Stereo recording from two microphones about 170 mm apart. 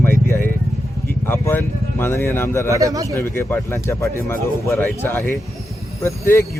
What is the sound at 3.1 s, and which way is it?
Speech, 15° left (ahead or behind).